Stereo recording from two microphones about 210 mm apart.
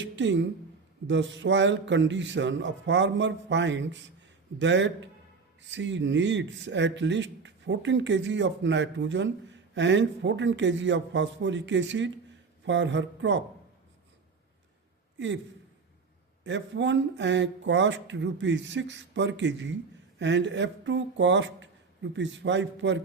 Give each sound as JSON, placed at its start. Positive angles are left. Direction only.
{"t": 0.0, "sound": "a man's voice", "side_deg": -60}
{"t": 16.4, "sound": "a man's voice", "side_deg": -60}